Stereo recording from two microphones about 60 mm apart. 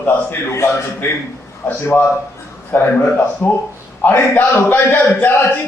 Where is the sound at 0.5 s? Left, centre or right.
Left.